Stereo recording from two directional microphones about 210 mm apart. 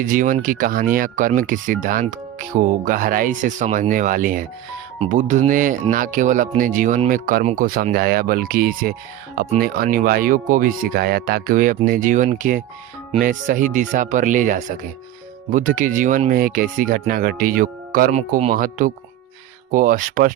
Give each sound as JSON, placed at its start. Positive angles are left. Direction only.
{"t": 0.0, "sound": "speech", "side_deg": -40}